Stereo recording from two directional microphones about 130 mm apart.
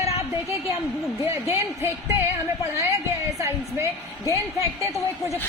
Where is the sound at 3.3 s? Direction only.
20° right (ahead or behind).